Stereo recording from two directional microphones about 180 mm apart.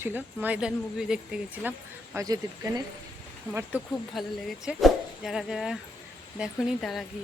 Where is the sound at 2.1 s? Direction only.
20° right (ahead or behind).